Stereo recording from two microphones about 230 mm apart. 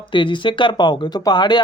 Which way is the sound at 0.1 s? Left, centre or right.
Left.